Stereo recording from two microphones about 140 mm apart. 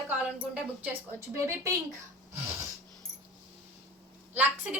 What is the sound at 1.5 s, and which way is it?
Speech, 25° right (ahead or behind).